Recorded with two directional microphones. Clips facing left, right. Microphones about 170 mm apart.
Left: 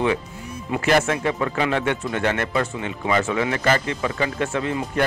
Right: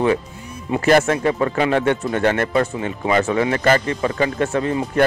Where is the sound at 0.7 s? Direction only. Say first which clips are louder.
Right 4 dB; 40° right (ahead or behind).